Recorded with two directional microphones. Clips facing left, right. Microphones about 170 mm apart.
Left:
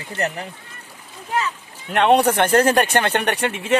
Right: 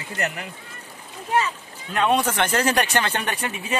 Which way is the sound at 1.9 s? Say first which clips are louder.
Left 6 dB; 70° left (ahead or behind).